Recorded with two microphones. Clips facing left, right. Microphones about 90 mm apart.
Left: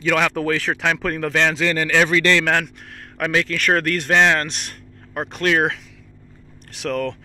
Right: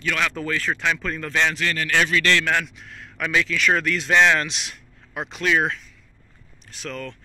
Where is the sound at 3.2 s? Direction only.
55° left (ahead or behind).